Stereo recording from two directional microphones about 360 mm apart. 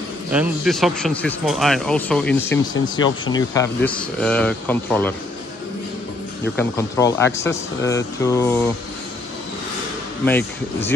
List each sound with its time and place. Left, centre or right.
0.3 s speech: centre
6.5 s speech: centre
10.2 s speech: centre